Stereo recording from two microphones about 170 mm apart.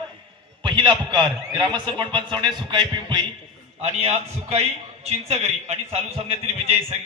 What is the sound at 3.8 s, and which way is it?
A man's voice, 40° right (ahead or behind).